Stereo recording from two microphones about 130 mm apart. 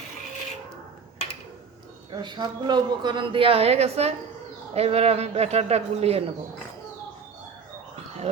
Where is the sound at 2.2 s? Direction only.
35° right (ahead or behind); by 6.2 s 50° right (ahead or behind).